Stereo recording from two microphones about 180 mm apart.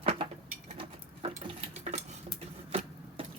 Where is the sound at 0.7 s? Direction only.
30° right (ahead or behind).